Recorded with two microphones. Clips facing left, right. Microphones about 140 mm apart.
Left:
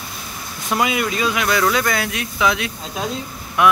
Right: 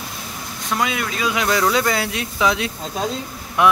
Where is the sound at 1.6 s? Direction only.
25° right (ahead or behind).